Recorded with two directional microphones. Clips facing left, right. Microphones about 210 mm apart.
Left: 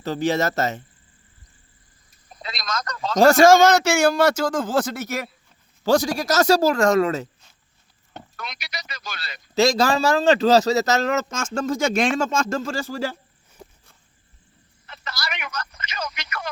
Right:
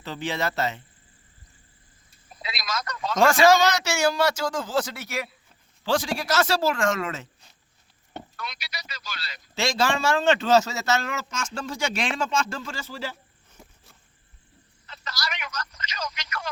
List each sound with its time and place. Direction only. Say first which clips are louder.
0.0 s a man's voice: left 7 dB; 40° left (ahead or behind)
2.3 s a sound: left 2 dB; centre (ahead or behind)
3.2 s a man's voice: left 5 dB; 40° left (ahead or behind)
8.9 s a man's voice: left 3 dB; 50° left (ahead or behind)
9.6 s a man's voice: left 6 dB; 40° left (ahead or behind)
15.0 s speech: left 2 dB; 55° left (ahead or behind)